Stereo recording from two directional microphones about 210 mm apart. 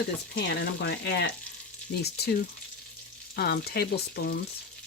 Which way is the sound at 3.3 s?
50° left (ahead or behind).